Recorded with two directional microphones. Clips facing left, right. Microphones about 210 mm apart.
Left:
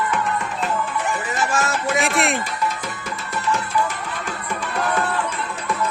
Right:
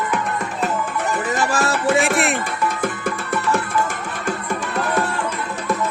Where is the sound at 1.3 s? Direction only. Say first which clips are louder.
Right 2 dB; 35° right (ahead or behind).